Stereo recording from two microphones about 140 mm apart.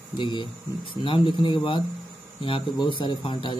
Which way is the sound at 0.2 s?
35° left (ahead or behind).